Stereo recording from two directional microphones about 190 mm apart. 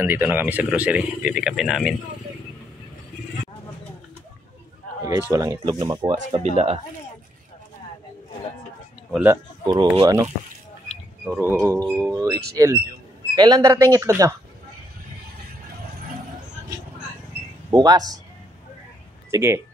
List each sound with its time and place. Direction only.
0.0 s speech: 10° right (ahead or behind)
5.3 s speech: 20° right (ahead or behind)
6.3 s speech: 35° right (ahead or behind)
9.2 s speech: 20° right (ahead or behind)
11.2 s speech: 10° right (ahead or behind)
17.6 s speech: 20° right (ahead or behind)
19.3 s speech: 15° right (ahead or behind)